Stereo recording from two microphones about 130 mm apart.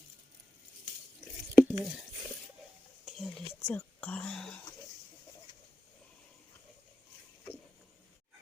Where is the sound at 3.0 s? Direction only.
Centre (ahead or behind).